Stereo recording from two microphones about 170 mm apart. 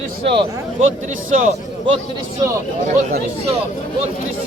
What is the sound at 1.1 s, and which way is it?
Speech, 45° right (ahead or behind).